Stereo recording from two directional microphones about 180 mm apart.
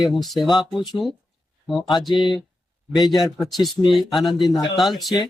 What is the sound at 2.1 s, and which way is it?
Speech, 25° left (ahead or behind).